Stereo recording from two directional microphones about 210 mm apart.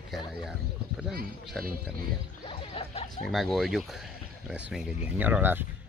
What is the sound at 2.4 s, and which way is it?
Music, 25° left (ahead or behind).